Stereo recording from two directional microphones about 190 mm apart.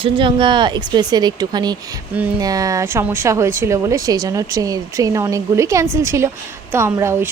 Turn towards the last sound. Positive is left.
turn(degrees=-15)  # may be behind; listen again after turning